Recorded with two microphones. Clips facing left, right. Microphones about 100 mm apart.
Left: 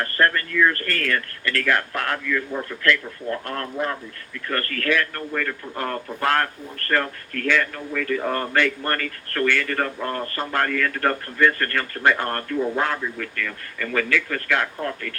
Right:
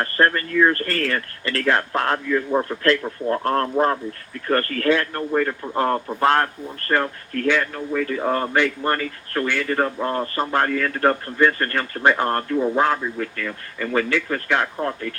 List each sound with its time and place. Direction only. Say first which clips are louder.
0.0 s a man's voice: right 2 dB; 30° right (ahead or behind)